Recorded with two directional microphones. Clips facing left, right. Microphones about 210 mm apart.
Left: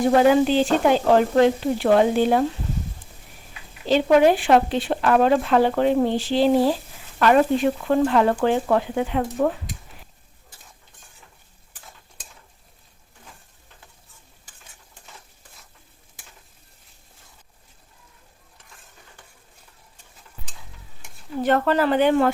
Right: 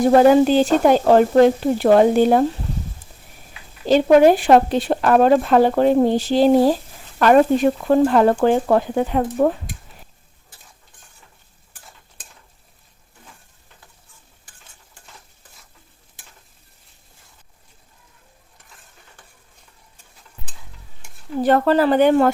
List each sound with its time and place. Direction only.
0.1 s speech: 40° right (ahead or behind)
3.8 s speech: 45° right (ahead or behind)
21.4 s speech: 35° right (ahead or behind)